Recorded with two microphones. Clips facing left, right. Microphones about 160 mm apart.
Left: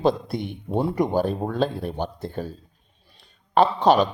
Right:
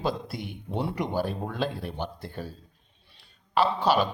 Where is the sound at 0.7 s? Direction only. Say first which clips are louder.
Left 7 dB; 45° left (ahead or behind).